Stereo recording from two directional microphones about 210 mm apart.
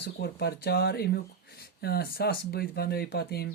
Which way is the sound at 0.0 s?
50° left (ahead or behind).